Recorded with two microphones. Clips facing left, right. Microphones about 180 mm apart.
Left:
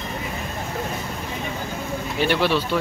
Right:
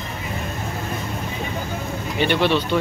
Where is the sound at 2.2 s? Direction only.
5° left (ahead or behind).